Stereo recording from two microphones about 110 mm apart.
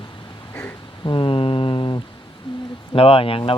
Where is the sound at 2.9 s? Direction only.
55° left (ahead or behind).